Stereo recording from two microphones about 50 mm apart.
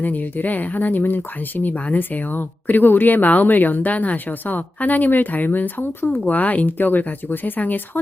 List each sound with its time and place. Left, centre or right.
0.0 s speech: left